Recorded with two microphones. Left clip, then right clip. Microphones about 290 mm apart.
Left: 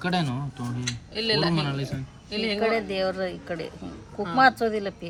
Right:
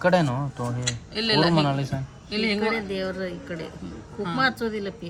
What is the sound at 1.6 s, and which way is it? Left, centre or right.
Speech, centre.